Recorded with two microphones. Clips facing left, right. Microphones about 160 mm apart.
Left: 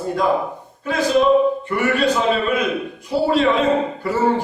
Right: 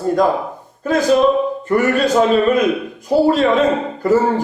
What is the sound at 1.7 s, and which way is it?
Speech, 45° right (ahead or behind).